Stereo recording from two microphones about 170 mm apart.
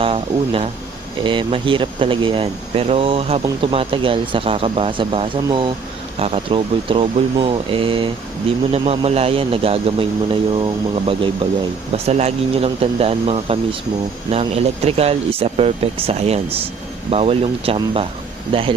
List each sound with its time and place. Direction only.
0.0 s speech: 35° right (ahead or behind)